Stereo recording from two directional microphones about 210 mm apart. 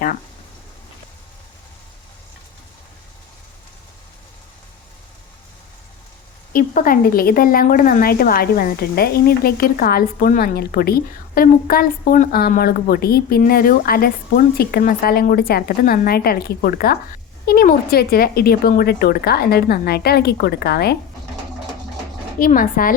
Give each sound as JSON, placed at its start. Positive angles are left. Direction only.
{"t": 6.5, "sound": "a woman's voice", "side_deg": 40}
{"t": 22.4, "sound": "speech", "side_deg": 40}